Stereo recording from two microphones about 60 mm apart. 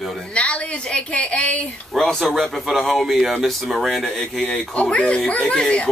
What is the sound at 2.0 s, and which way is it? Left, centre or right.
Speech, centre.